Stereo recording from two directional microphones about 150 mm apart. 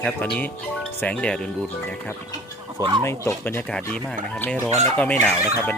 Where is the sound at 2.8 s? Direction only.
30° right (ahead or behind).